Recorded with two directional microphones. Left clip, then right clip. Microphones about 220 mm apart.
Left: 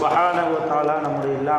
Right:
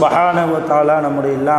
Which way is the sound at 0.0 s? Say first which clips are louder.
Right 6 dB; 55° right (ahead or behind).